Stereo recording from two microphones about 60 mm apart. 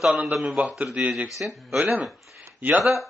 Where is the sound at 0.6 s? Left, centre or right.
Right.